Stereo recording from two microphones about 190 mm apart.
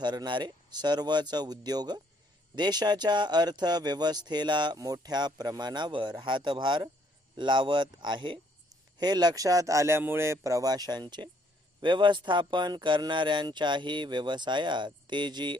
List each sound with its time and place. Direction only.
0.0 s speech: 20° right (ahead or behind)